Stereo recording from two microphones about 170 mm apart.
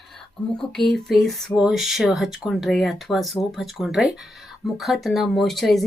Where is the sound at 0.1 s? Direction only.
Centre (ahead or behind).